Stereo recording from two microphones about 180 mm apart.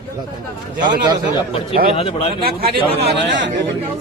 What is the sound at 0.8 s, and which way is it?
Speech, 20° right (ahead or behind).